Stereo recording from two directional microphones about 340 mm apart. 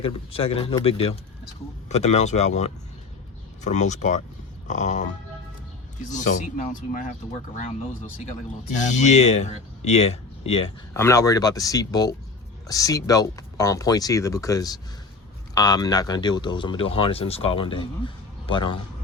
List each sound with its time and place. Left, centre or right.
0.0 s speech: centre
8.7 s speech: left